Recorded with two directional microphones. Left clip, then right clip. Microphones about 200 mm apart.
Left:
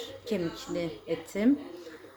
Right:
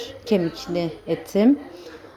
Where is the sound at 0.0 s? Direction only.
25° right (ahead or behind).